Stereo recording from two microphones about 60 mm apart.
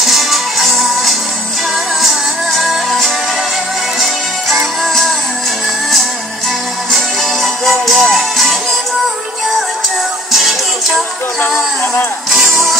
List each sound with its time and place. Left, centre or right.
0.0 s music: centre
7.4 s music: centre
12.3 s music: centre